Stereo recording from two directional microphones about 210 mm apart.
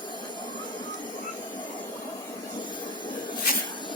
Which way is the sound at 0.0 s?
20° left (ahead or behind).